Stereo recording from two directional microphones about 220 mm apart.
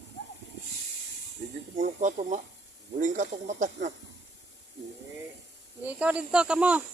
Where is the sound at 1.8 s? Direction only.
35° right (ahead or behind).